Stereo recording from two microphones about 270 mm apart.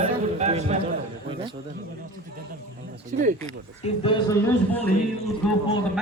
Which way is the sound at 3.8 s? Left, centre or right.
Centre.